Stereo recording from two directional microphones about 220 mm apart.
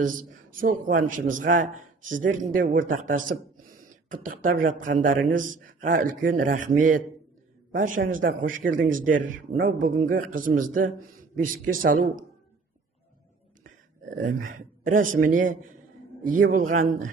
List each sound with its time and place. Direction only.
0.0 s a man's voice: 35° right (ahead or behind)
14.8 s a man's voice: 40° right (ahead or behind)